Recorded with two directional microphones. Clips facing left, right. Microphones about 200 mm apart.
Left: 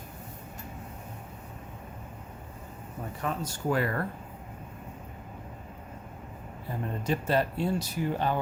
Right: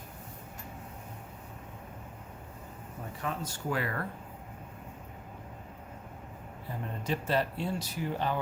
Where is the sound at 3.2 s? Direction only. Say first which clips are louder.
Left 4 dB; 45° left (ahead or behind).